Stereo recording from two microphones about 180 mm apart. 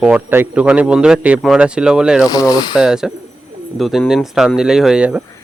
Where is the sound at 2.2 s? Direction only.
20° left (ahead or behind).